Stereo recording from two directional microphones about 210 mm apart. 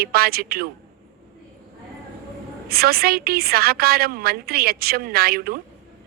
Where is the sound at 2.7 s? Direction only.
45° right (ahead or behind).